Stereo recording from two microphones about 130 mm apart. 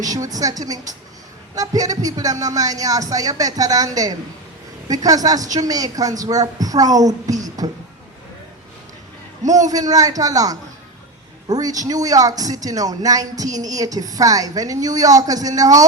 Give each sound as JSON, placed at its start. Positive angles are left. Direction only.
{"t": 0.0, "sound": "speech", "side_deg": -30}
{"t": 9.6, "sound": "speech", "side_deg": -30}